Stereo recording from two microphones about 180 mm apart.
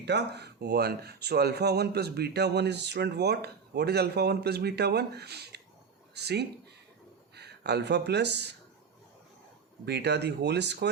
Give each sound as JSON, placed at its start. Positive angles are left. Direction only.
{"t": 0.0, "sound": "speech", "side_deg": -70}
{"t": 9.8, "sound": "speech", "side_deg": -70}